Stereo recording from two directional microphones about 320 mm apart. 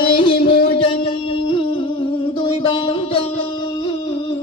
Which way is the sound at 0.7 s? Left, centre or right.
Centre.